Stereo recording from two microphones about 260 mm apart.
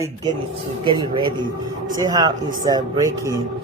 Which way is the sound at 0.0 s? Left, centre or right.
Centre.